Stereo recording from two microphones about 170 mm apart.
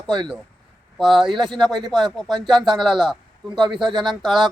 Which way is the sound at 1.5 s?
Centre (ahead or behind).